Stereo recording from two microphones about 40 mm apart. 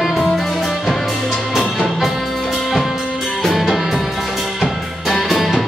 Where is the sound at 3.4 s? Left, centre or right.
Centre.